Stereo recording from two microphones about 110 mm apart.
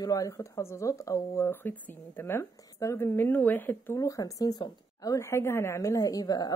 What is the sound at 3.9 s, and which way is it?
A woman's voice, 30° left (ahead or behind).